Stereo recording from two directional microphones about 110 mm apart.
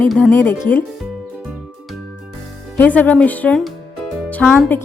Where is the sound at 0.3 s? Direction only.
20° left (ahead or behind).